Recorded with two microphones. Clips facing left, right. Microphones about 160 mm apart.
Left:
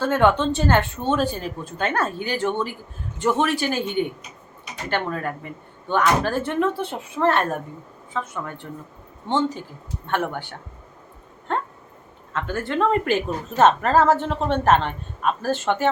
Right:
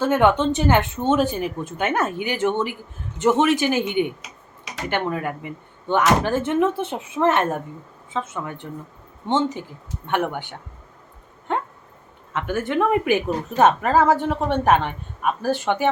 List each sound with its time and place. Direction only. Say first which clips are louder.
0.0 s a woman's voice: right 1 dB; 15° right (ahead or behind)
4.2 s tick-tock: even; 90° right
4.9 s a woman's voice: right 1 dB; 15° right (ahead or behind)
11.5 s dog: right 1 dB; 15° right (ahead or behind)
12.3 s a woman's voice: right 2 dB; 15° right (ahead or behind)